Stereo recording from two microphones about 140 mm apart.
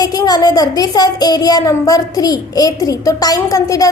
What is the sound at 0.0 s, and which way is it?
A child's voice, 25° left (ahead or behind).